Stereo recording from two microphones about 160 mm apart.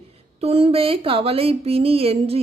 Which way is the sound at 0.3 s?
40° right (ahead or behind).